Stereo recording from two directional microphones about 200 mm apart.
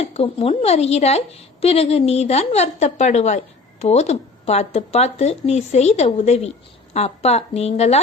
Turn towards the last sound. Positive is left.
turn(degrees=30)  # may be behind; listen again after turning